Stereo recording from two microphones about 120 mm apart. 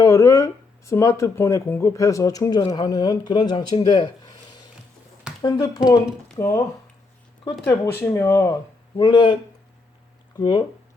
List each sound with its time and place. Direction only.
0.0 s speech: 25° left (ahead or behind)
5.4 s speech: 35° left (ahead or behind)
7.6 s speech: 20° left (ahead or behind)
9.0 s speech: 35° left (ahead or behind)